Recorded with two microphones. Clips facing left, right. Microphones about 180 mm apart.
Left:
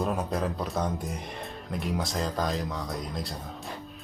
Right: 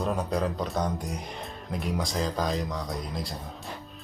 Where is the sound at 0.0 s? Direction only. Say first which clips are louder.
Right 1 dB; centre (ahead or behind).